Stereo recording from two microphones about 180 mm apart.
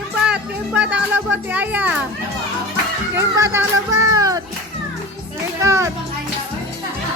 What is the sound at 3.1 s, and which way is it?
Music, 15° right (ahead or behind).